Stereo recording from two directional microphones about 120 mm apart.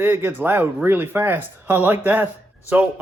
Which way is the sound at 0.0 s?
15° right (ahead or behind).